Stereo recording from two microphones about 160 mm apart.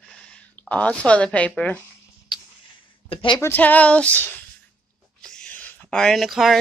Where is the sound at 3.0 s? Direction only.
35° left (ahead or behind).